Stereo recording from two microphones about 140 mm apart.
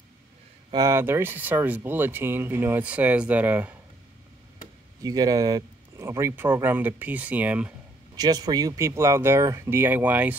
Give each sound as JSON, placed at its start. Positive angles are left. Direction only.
{"t": 0.7, "sound": "speech", "side_deg": -20}
{"t": 5.0, "sound": "speech", "side_deg": -25}
{"t": 8.2, "sound": "speech", "side_deg": -30}